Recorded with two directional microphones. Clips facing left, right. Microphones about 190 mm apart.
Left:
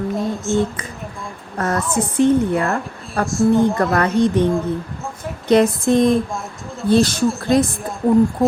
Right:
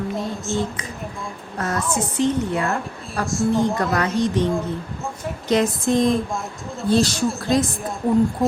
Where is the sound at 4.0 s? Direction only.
55° left (ahead or behind).